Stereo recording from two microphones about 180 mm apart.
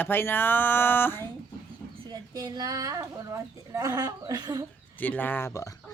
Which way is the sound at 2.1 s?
20° right (ahead or behind).